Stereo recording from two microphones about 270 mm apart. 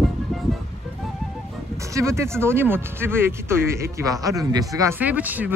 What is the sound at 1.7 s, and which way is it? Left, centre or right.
Speech, centre.